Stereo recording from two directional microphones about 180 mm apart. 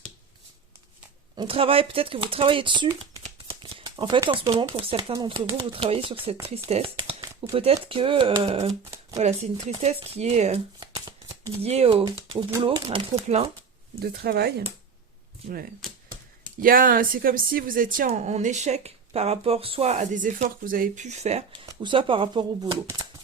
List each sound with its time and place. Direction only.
1.4 s speech: 30° right (ahead or behind)
8.8 s shuffling cards: 15° right (ahead or behind)
9.1 s speech: 35° right (ahead or behind)
10.8 s shuffling cards: 25° right (ahead or behind)
11.6 s speech: 35° right (ahead or behind)
14.0 s speech: 60° right (ahead or behind)
16.6 s a woman's voice: 50° right (ahead or behind)
21.7 s speech: 25° right (ahead or behind)